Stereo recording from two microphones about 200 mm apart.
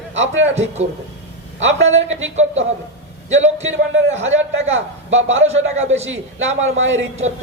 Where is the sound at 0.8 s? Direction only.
35° right (ahead or behind).